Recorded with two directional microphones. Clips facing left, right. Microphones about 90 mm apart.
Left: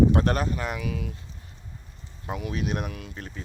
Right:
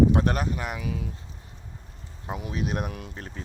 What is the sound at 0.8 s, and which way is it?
Speech, 25° right (ahead or behind).